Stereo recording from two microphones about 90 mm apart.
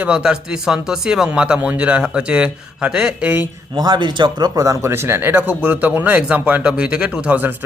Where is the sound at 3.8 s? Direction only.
55° right (ahead or behind).